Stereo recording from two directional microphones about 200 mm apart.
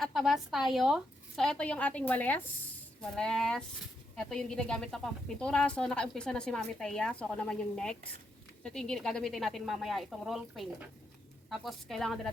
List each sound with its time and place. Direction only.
0.0 s a woman's voice: centre (ahead or behind)